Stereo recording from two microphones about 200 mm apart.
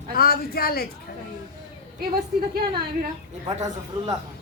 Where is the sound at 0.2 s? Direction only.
50° left (ahead or behind).